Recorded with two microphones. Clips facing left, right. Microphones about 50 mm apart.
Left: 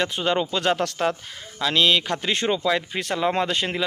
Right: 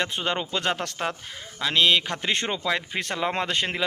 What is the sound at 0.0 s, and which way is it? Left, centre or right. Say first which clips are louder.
Speech: left 4 dB; right.